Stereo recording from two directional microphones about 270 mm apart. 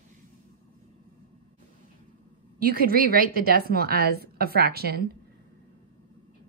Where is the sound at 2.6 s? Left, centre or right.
Right.